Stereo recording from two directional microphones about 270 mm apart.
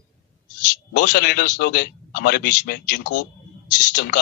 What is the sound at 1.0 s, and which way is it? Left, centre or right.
A man's voice, left.